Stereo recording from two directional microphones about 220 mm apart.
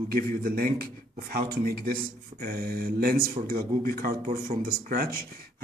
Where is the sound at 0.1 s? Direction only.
40° right (ahead or behind).